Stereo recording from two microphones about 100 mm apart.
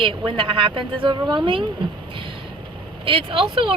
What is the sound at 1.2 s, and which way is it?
Speech, 45° right (ahead or behind).